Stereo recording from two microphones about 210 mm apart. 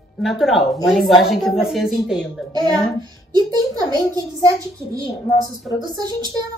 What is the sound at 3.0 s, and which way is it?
A child's voice, 20° right (ahead or behind).